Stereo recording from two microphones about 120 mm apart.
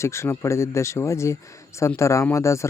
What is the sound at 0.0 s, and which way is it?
Speech, 25° left (ahead or behind).